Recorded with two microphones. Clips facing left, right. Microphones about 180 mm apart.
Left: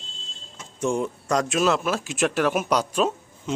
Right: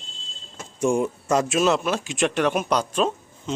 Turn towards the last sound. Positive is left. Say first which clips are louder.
# even
turn(degrees=10)  # may be behind; listen again after turning